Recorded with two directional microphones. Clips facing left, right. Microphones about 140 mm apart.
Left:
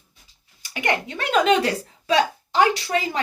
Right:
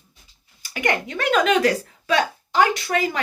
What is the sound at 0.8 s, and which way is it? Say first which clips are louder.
A woman's voice: right 2 dB; 30° left (ahead or behind).